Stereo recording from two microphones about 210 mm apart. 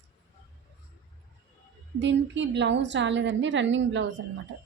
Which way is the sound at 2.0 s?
60° right (ahead or behind).